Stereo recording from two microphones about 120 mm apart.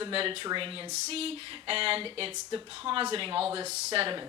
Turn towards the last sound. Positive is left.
turn(degrees=-50)  # may be behind; listen again after turning